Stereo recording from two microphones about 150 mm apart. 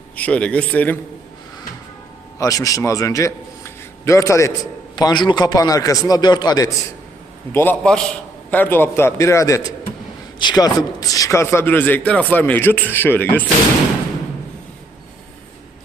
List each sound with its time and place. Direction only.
0.2 s a man's voice: 10° left (ahead or behind)
2.4 s a man's voice: 20° left (ahead or behind)
7.5 s a man's voice: 15° left (ahead or behind)